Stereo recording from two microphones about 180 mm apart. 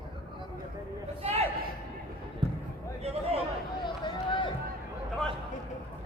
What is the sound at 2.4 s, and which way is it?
Basketball bounce, 25° right (ahead or behind).